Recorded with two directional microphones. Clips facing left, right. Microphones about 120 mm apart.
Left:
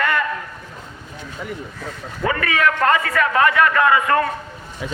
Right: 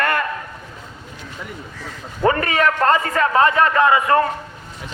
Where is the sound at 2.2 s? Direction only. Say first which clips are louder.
Right 2 dB; 35° right (ahead or behind).